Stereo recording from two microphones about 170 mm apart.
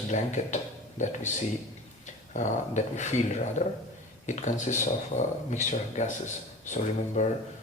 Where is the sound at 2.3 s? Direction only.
45° left (ahead or behind).